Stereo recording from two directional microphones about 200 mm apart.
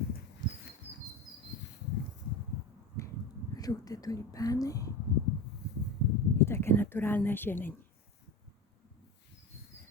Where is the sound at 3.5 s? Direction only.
20° left (ahead or behind).